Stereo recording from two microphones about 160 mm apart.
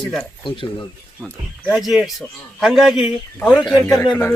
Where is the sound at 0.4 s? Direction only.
30° left (ahead or behind).